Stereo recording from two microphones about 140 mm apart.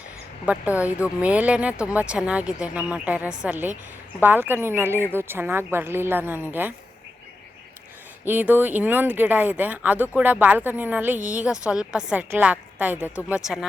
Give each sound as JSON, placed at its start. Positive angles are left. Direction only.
{"t": 0.4, "sound": "speech", "side_deg": -10}
{"t": 8.2, "sound": "a woman's voice", "side_deg": -15}